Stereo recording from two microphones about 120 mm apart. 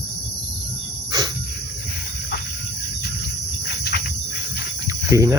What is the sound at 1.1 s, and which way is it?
Cricket, 35° right (ahead or behind).